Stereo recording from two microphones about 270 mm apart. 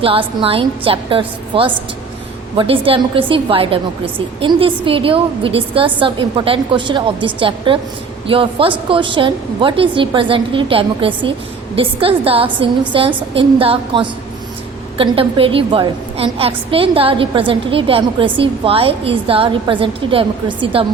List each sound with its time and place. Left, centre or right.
0.0 s a woman's voice: centre